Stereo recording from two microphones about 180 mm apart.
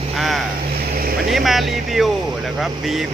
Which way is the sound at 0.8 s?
55° right (ahead or behind).